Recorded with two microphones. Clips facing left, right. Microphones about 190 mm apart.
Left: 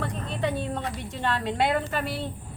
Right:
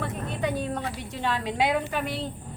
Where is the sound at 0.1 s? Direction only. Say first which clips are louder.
Even; 5° right (ahead or behind).